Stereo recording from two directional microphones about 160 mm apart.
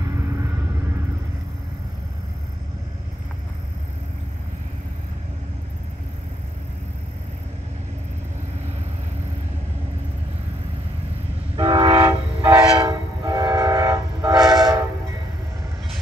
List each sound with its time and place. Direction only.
11.5 s train: 30° right (ahead or behind)